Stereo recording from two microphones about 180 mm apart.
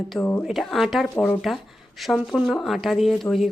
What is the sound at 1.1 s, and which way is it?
Speech, 10° left (ahead or behind).